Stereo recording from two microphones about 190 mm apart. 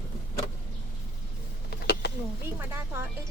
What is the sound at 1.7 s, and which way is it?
Vehicle, 55° left (ahead or behind).